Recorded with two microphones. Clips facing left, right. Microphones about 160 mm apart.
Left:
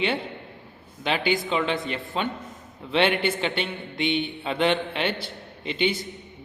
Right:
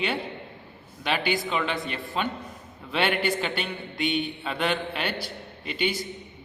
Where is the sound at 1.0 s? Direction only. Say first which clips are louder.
Left 2 dB; 20° left (ahead or behind).